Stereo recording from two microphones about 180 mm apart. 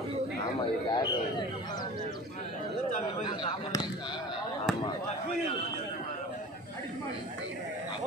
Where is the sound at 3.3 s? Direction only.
30° left (ahead or behind).